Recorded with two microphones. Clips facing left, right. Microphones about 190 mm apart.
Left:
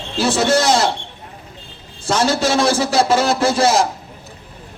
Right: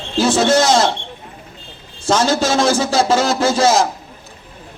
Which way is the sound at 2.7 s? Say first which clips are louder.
Even; 30° left (ahead or behind).